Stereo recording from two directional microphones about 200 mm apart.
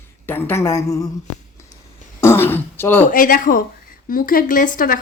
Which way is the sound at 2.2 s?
10° left (ahead or behind).